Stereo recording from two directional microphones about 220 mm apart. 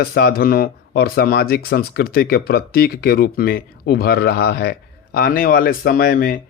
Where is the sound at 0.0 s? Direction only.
45° left (ahead or behind).